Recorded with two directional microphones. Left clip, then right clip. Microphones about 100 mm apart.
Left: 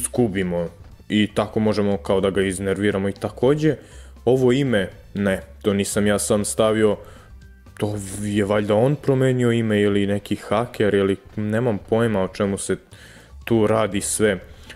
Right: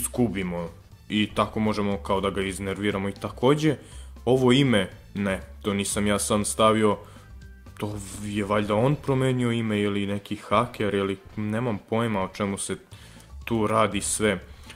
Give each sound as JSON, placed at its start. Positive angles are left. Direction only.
{"t": 0.0, "sound": "speech", "side_deg": 35}
{"t": 1.6, "sound": "speech", "side_deg": 35}
{"t": 11.4, "sound": "speech", "side_deg": 25}